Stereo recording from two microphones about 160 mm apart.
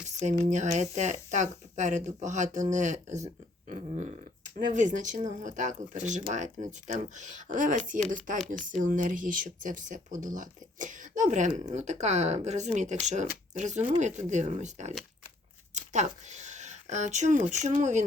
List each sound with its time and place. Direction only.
0.5 s speech: 50° right (ahead or behind)